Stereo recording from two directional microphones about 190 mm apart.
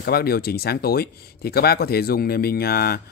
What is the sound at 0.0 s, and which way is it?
Speech, 55° left (ahead or behind).